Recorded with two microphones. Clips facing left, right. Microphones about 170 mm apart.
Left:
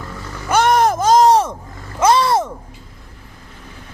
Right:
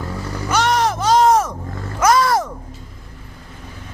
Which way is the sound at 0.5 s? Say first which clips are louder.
Left 4 dB; 50° left (ahead or behind).